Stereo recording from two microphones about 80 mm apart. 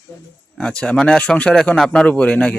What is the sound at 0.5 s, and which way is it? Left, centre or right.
Speech, centre.